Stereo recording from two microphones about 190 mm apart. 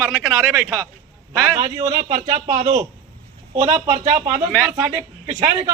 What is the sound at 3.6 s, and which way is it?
Speech, 10° right (ahead or behind).